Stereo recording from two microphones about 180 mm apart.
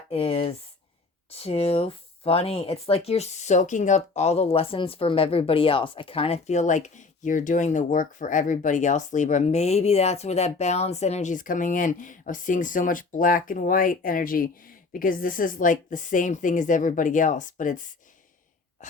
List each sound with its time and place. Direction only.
0.1 s speech: 30° left (ahead or behind)